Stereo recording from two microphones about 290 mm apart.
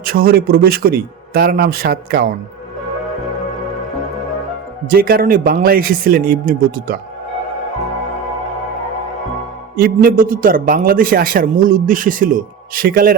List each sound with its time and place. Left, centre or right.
0.0 s a man's voice: right
4.9 s a man's voice: right
9.7 s a man's voice: right